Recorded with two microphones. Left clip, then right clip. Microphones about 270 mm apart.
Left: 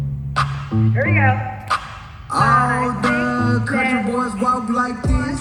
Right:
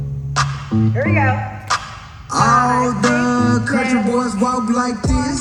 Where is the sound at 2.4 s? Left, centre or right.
Centre.